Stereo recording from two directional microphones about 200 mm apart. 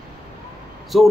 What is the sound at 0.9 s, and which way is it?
Speech, centre (ahead or behind).